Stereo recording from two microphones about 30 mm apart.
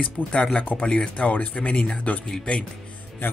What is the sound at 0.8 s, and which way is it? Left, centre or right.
Speech, left.